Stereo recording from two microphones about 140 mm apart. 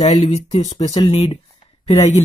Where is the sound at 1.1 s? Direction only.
40° left (ahead or behind).